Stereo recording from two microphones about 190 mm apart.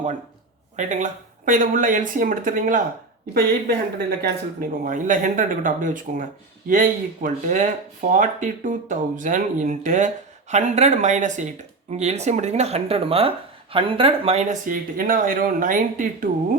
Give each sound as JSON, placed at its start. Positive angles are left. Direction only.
{"t": 0.8, "sound": "speech", "side_deg": -40}
{"t": 4.2, "sound": "speech", "side_deg": -45}